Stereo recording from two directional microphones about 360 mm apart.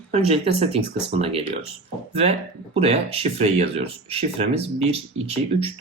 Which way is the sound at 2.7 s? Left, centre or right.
Centre.